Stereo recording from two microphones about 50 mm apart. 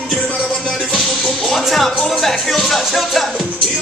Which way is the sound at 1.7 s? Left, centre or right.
Centre.